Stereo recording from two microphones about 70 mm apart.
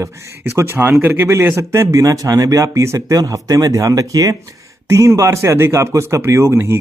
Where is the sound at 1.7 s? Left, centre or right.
Right.